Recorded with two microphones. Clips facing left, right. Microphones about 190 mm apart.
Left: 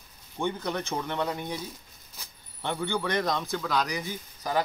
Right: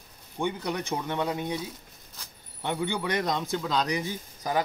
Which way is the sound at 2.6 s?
15° right (ahead or behind).